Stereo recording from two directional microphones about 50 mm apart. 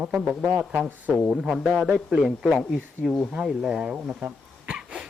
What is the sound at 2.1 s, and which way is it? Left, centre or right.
Speech, centre.